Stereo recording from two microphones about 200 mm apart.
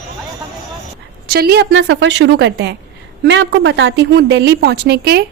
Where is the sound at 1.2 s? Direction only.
50° right (ahead or behind).